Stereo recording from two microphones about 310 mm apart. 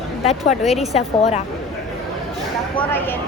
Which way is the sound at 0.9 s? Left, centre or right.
Left.